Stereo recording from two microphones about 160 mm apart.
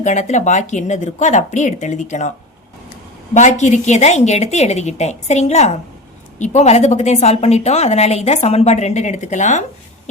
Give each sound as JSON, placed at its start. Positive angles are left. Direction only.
{"t": 0.0, "sound": "a woman's voice", "side_deg": 50}
{"t": 3.3, "sound": "a woman's voice", "side_deg": 50}